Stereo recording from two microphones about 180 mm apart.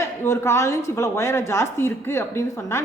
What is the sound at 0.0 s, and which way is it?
A woman's voice, 15° left (ahead or behind).